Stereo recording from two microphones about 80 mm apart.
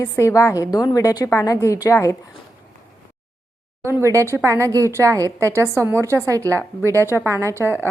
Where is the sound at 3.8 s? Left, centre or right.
Right.